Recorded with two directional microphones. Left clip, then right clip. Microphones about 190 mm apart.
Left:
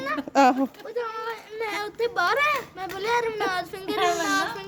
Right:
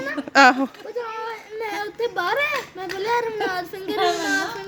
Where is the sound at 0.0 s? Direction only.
20° left (ahead or behind).